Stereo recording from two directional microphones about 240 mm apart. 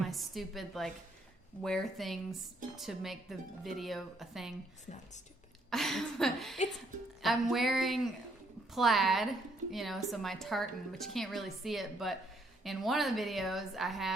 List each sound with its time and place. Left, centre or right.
0.1 s a woman's voice: centre
4.9 s speech: left
5.7 s a woman's voice: centre